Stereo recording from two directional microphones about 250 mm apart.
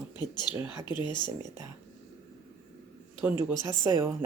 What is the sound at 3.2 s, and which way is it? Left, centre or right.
Speech, centre.